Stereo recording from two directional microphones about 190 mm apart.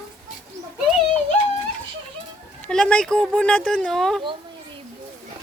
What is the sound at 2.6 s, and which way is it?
Speech, 5° left (ahead or behind).